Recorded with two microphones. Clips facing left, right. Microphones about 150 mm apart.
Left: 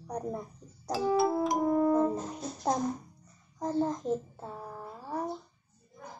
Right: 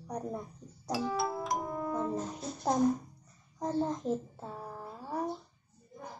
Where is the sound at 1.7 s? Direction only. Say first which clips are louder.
Left 9 dB; 40° left (ahead or behind).